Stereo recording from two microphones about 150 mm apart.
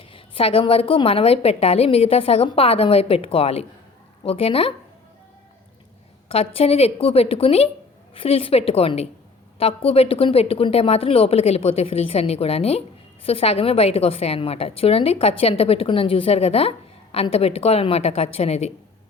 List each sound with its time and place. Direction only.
0.0 s a woman's voice: 35° left (ahead or behind)
6.2 s a woman's voice: 40° left (ahead or behind)